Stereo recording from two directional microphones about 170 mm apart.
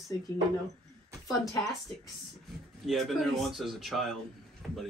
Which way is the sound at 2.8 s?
Centre (ahead or behind).